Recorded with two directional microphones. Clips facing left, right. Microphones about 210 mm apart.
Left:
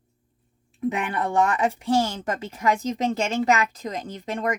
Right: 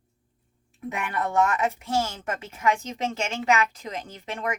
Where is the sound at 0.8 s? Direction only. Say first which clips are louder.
Left 4 dB; 30° left (ahead or behind).